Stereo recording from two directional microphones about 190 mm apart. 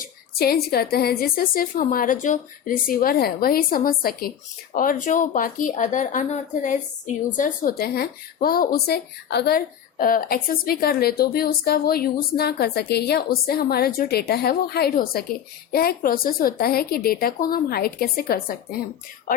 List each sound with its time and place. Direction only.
0.0 s speech: 50° left (ahead or behind)